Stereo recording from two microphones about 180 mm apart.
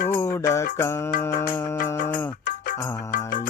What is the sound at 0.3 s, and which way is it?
Mantra, 15° left (ahead or behind).